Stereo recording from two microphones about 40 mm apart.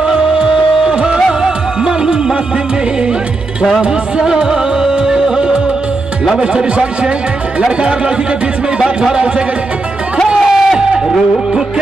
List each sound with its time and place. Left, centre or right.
0.0 s music: centre
3.8 s music: right
6.4 s a man's voice: right
10.4 s music: centre